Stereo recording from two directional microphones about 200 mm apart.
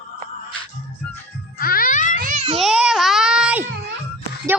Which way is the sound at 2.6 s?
5° right (ahead or behind).